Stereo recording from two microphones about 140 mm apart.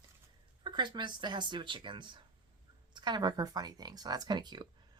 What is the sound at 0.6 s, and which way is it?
Speech, 30° right (ahead or behind).